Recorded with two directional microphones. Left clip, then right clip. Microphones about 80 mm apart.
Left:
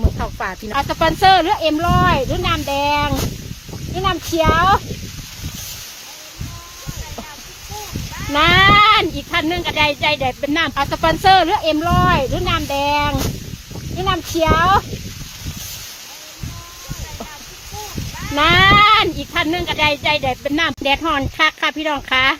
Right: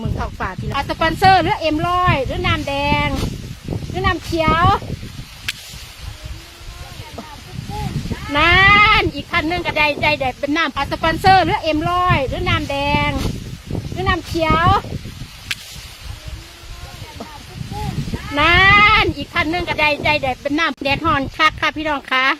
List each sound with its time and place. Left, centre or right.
0.2 s speech: centre
8.3 s speech: centre
9.5 s speech: centre
10.6 s speech: centre
18.3 s speech: centre
20.2 s speech: centre